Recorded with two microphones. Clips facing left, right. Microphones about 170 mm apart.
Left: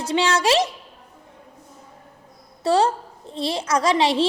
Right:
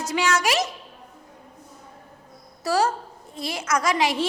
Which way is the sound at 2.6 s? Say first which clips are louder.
Left 4 dB; 30° left (ahead or behind).